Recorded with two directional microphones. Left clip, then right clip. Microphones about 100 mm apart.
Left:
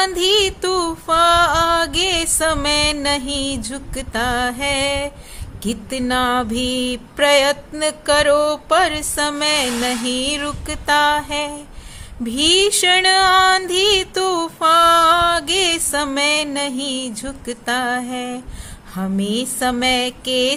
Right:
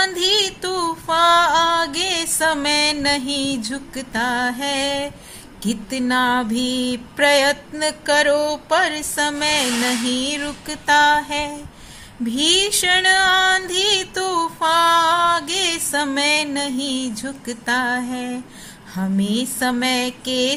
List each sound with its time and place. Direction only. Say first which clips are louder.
0.0 s music: left 2 dB; 30° left (ahead or behind)
2.5 s mantra: even; 25° left (ahead or behind)
3.9 s music: left 2 dB; 40° left (ahead or behind)
10.2 s music: left 2 dB; 45° left (ahead or behind)
10.8 s mantra: right 1 dB; 25° left (ahead or behind)
12.3 s music: left 3 dB; 40° left (ahead or behind)
15.9 s music: left 1 dB; 30° left (ahead or behind)
18.9 s mantra: left 1 dB; 30° left (ahead or behind)